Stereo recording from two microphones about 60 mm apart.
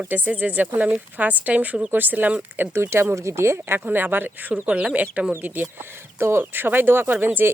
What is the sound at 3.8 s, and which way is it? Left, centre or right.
Speech, right.